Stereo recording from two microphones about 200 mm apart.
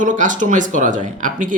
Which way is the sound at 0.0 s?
40° right (ahead or behind).